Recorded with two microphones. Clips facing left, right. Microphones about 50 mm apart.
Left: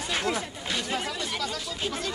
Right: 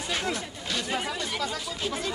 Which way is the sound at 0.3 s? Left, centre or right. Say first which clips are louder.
Left 2 dB; centre.